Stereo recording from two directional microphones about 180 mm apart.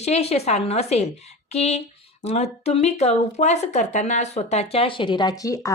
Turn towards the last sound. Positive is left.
turn(degrees=20)  # may be behind; listen again after turning